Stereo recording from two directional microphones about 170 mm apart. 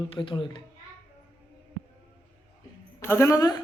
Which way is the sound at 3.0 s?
15° left (ahead or behind).